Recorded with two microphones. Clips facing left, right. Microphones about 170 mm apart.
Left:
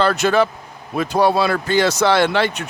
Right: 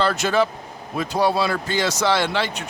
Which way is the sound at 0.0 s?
60° left (ahead or behind).